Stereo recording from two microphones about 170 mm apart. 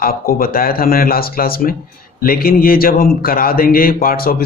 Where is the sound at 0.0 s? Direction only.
60° left (ahead or behind).